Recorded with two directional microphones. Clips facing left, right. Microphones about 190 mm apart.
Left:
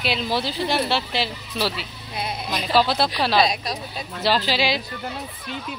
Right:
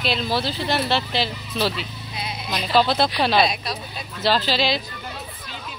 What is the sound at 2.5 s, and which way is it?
Speech, 5° left (ahead or behind).